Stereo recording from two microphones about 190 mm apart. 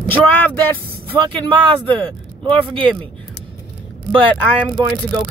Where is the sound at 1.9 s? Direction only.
5° left (ahead or behind).